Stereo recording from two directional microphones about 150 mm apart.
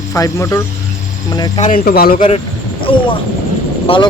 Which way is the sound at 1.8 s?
90° left.